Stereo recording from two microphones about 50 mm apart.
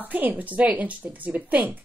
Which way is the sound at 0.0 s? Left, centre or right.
Right.